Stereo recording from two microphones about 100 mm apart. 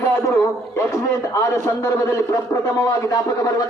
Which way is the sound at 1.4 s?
30° left (ahead or behind).